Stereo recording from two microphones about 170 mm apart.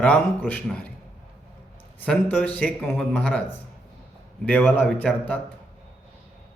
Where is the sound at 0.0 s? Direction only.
10° left (ahead or behind).